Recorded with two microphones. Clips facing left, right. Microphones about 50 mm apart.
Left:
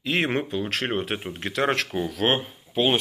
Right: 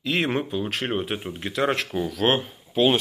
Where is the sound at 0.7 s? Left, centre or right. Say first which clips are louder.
Even; left.